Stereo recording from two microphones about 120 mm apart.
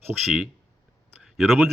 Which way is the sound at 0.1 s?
10° left (ahead or behind).